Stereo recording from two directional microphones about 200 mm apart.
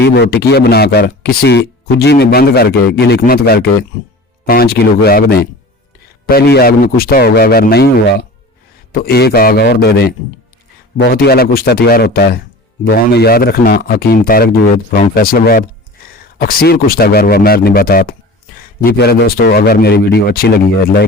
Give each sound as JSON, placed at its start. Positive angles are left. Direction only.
{"t": 0.0, "sound": "speech", "side_deg": 55}